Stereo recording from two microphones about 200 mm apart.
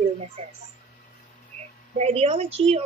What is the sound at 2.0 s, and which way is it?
Speech, 30° right (ahead or behind).